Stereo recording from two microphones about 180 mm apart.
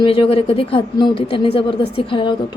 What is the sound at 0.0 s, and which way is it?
A woman's voice, 30° left (ahead or behind).